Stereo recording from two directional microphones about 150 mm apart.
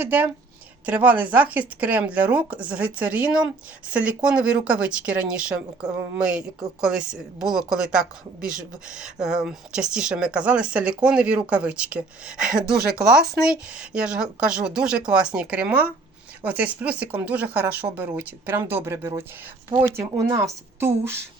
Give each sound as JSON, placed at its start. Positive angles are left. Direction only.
{"t": 0.0, "sound": "speech", "side_deg": -10}
{"t": 19.7, "sound": "speech", "side_deg": -40}
{"t": 20.1, "sound": "a woman's voice", "side_deg": -25}